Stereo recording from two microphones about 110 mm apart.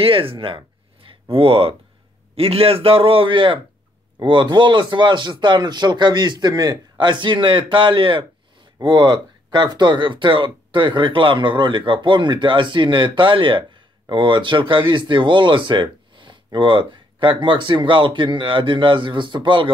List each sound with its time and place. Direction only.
0.0 s a man's voice: 55° right (ahead or behind)